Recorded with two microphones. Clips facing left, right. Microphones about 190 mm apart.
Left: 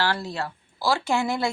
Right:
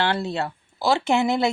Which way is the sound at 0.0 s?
25° right (ahead or behind).